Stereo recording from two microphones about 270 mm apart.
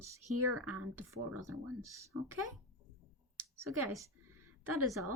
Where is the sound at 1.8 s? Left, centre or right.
Centre.